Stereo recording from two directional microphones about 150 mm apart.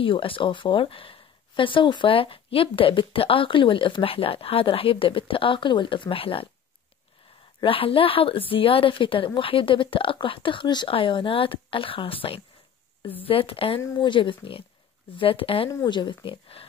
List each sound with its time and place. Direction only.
0.0 s a woman's voice: 35° left (ahead or behind)
7.6 s a woman's voice: 35° left (ahead or behind)
15.7 s a woman's voice: 25° left (ahead or behind)